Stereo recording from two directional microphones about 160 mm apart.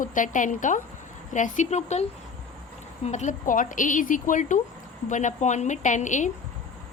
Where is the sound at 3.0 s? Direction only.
45° left (ahead or behind).